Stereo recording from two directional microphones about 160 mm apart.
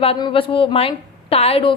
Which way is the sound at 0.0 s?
35° left (ahead or behind).